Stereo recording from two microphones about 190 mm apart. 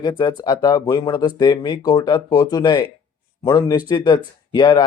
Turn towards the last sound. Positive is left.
turn(degrees=25)  # may be behind; listen again after turning